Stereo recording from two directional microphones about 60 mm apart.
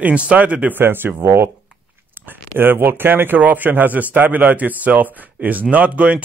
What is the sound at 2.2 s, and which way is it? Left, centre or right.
Speech, right.